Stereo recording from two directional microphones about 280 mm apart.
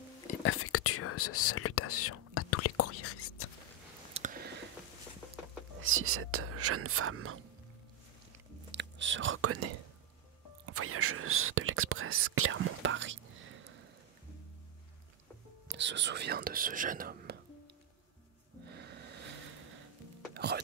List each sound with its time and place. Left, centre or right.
0.4 s whispering: left
4.1 s a sound: right
5.8 s speech: right
8.7 s whispering: right
15.7 s speech: right
18.7 s snort: right
20.3 s music: right